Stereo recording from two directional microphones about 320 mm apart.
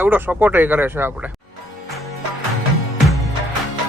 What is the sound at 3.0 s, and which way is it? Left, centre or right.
Music, centre.